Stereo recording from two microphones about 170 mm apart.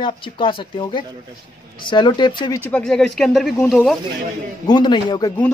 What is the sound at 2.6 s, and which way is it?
Speech, 5° left (ahead or behind).